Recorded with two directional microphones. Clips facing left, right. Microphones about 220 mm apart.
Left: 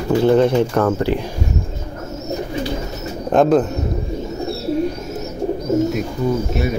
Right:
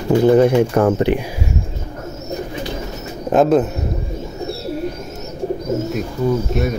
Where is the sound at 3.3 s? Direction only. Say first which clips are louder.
Even; 5° right (ahead or behind).